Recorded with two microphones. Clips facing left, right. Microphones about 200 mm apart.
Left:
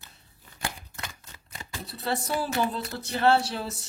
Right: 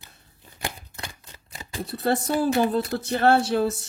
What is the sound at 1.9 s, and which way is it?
Speech, 50° right (ahead or behind).